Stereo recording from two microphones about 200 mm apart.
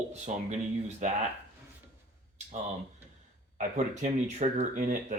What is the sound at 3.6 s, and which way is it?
Speech, 35° right (ahead or behind).